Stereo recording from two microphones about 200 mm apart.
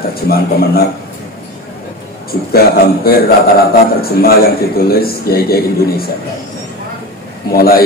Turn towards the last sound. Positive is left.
turn(degrees=50)  # may be behind; listen again after turning